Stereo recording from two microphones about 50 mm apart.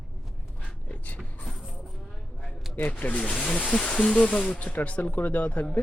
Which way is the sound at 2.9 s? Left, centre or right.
Left.